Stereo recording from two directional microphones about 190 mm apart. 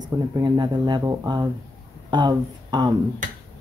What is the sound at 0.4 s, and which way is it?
Speech, 25° right (ahead or behind).